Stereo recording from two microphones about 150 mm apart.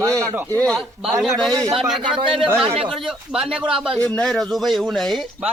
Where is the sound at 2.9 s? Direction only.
Centre (ahead or behind).